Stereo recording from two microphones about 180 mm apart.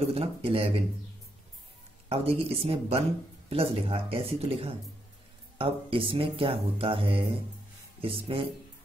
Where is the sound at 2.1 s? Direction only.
35° right (ahead or behind).